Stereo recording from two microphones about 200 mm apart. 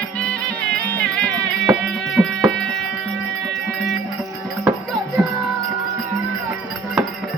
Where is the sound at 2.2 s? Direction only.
5° right (ahead or behind).